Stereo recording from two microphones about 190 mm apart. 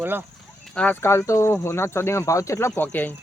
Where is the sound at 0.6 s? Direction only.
5° left (ahead or behind).